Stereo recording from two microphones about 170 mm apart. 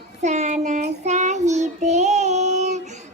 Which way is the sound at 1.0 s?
45° right (ahead or behind).